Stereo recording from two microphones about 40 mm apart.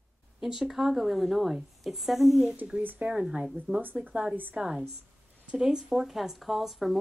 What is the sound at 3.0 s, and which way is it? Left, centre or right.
Speech, right.